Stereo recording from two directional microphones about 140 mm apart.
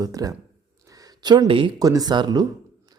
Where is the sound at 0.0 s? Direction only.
25° right (ahead or behind).